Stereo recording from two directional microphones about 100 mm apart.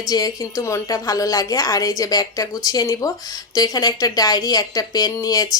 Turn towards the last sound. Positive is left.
turn(degrees=40)  # may be behind; listen again after turning